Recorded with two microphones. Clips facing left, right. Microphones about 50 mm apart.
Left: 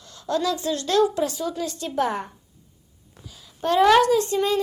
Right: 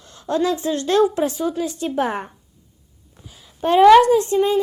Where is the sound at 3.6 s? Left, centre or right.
Right.